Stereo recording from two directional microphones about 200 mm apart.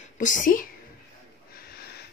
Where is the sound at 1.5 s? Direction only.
55° left (ahead or behind).